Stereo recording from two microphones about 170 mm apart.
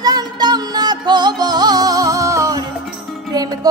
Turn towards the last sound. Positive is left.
turn(degrees=-20)  # may be behind; listen again after turning